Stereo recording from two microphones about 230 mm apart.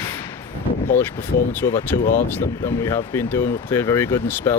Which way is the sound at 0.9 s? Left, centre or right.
Centre.